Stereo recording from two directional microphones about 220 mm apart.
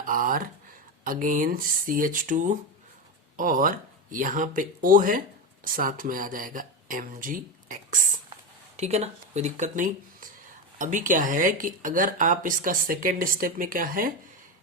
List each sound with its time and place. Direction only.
0.0 s speech: 40° right (ahead or behind)